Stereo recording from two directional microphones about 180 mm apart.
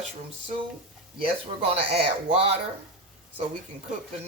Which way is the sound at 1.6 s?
35° right (ahead or behind).